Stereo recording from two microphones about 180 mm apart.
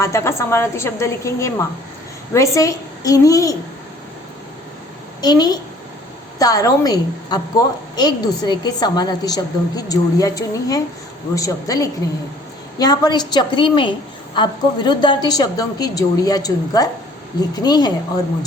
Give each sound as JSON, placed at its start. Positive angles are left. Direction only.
{"t": 0.0, "sound": "a woman's voice", "side_deg": 15}
{"t": 5.2, "sound": "a woman's voice", "side_deg": 20}